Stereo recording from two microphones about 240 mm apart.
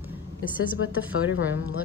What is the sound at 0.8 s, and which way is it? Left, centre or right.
Speech, left.